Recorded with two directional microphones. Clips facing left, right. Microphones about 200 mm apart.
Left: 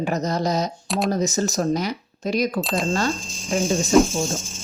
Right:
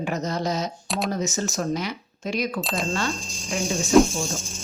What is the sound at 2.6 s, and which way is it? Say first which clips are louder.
Speech: left 4 dB; centre (ahead or behind).